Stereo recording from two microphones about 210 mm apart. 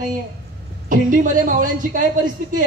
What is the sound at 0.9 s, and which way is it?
A woman's voice, 40° right (ahead or behind).